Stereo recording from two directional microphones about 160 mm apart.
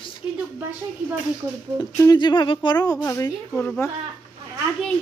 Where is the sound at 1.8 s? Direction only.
20° left (ahead or behind).